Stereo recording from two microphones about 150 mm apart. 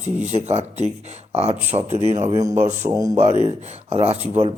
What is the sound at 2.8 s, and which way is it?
Speech, 25° right (ahead or behind).